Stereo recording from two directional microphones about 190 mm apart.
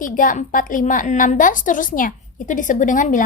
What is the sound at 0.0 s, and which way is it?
A woman's voice, 45° left (ahead or behind).